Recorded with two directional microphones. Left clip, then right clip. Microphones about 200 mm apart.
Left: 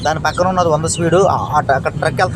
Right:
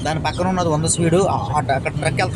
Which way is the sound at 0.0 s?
5° right (ahead or behind).